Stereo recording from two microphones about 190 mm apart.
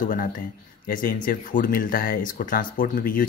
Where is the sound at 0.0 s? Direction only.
45° left (ahead or behind).